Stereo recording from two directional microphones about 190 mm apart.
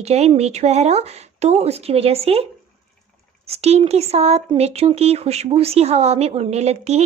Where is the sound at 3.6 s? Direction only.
35° right (ahead or behind).